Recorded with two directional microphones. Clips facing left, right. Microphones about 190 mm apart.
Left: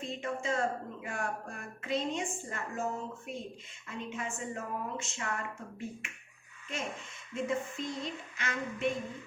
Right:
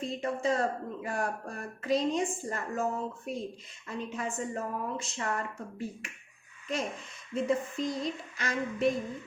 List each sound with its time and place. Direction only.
0.0 s speech: 35° right (ahead or behind)
7.3 s speech: 35° right (ahead or behind)